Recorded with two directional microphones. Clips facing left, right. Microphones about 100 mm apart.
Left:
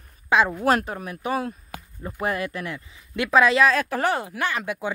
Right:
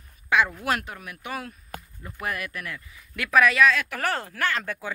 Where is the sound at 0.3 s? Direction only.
30° left (ahead or behind).